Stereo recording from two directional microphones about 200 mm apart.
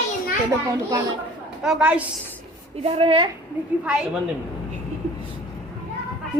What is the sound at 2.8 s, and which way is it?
Speech, 30° right (ahead or behind).